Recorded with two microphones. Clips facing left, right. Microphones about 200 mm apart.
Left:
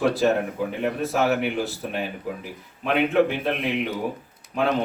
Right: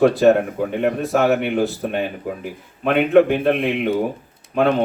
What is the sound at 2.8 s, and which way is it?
A man's voice, 55° right (ahead or behind).